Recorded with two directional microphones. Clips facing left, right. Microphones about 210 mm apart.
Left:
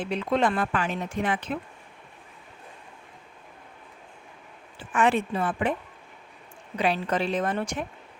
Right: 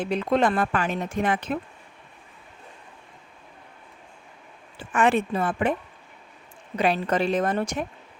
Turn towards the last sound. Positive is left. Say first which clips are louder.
# right 3 dB
turn(degrees=-40)  # may be behind; listen again after turning